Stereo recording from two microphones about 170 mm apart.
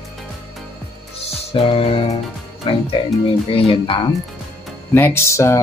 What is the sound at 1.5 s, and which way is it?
Speech, 35° left (ahead or behind).